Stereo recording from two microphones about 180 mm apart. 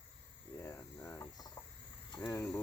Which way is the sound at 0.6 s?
15° left (ahead or behind).